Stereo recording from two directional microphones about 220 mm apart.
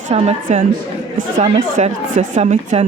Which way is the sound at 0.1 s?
30° right (ahead or behind).